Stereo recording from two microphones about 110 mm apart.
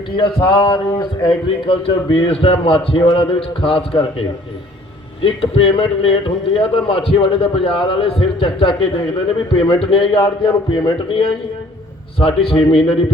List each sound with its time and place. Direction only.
0.4 s a man's voice: 40° left (ahead or behind)
12.5 s a man's voice: 55° left (ahead or behind)